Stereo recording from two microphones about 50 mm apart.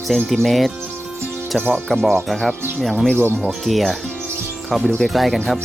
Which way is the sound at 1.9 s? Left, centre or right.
Centre.